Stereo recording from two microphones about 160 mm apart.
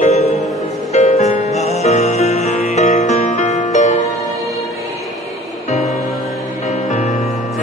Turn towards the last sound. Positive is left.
turn(degrees=45)  # may be behind; listen again after turning